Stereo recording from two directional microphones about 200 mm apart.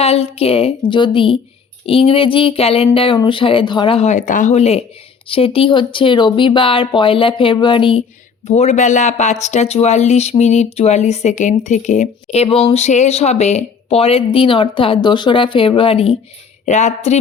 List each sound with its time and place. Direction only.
0.0 s speech: 30° left (ahead or behind)